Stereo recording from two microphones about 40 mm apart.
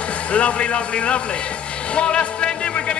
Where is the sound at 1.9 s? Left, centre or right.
Left.